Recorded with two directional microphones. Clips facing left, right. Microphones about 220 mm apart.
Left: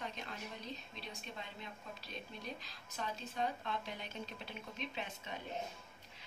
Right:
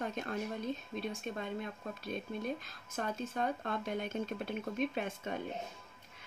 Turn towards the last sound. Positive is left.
turn(degrees=-50)  # may be behind; listen again after turning